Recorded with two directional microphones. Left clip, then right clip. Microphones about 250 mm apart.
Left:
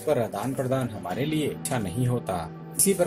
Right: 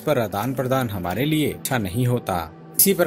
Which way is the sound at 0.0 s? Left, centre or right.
Right.